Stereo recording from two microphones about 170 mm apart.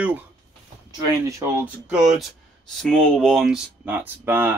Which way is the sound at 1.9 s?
5° right (ahead or behind).